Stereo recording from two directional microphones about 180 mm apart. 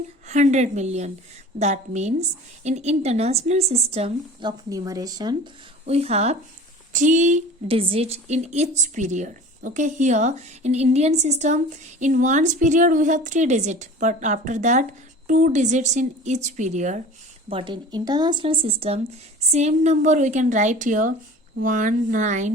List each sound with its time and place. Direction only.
0.3 s a woman's voice: 40° right (ahead or behind); by 5.4 s 20° right (ahead or behind)
5.8 s a woman's voice: 35° right (ahead or behind)
17.5 s a woman's voice: 30° right (ahead or behind)